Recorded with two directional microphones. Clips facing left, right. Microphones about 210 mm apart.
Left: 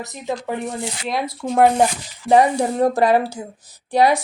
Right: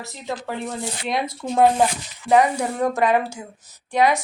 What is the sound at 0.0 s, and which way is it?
Speech, 20° left (ahead or behind).